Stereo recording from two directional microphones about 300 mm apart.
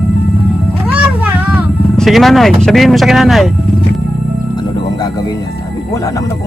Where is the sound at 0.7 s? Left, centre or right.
Centre.